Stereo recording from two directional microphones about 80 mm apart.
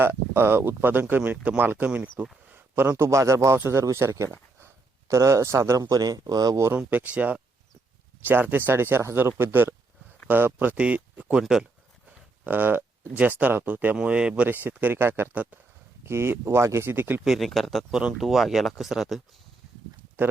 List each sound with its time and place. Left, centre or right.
0.0 s speech: right
3.0 s speech: right
6.7 s speech: centre
12.5 s speech: right
14.5 s speech: right
16.0 s speech: right
17.2 s speech: centre